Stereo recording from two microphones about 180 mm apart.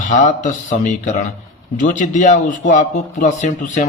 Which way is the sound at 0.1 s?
45° left (ahead or behind).